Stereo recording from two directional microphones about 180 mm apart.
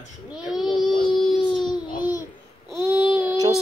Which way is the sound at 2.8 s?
10° right (ahead or behind).